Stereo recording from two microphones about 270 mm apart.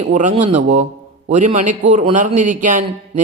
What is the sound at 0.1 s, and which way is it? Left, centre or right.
Speech, right.